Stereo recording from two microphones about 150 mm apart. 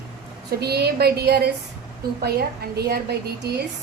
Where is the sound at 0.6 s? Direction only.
90° right.